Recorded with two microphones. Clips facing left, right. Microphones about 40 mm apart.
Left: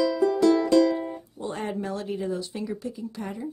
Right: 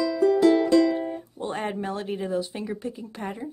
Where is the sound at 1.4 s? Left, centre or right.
Right.